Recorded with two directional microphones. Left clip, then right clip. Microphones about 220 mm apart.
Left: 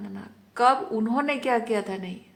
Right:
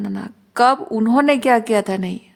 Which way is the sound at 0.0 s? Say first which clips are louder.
Right 12 dB; 55° right (ahead or behind).